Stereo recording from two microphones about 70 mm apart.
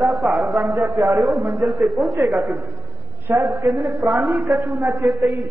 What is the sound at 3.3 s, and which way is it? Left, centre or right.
Speech, right.